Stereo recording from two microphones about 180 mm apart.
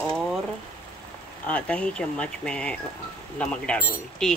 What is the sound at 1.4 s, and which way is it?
Speech, 10° left (ahead or behind).